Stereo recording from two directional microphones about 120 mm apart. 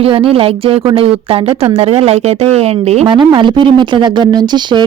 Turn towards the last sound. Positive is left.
turn(degrees=-40)  # may be behind; listen again after turning